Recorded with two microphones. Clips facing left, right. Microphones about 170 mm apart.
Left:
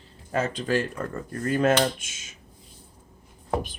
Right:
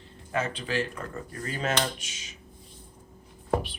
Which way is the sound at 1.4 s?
55° left (ahead or behind).